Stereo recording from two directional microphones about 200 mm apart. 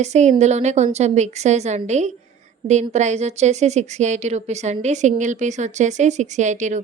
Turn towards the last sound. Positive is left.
turn(degrees=-35)  # may be behind; listen again after turning